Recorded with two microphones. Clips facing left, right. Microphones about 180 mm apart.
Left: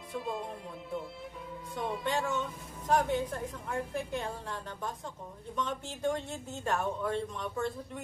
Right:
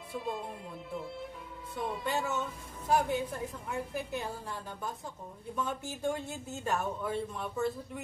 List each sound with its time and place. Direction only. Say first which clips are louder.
0.1 s a woman's voice: left 1 dB; centre (ahead or behind)
1.8 s a woman's voice: left 1 dB; 5° right (ahead or behind)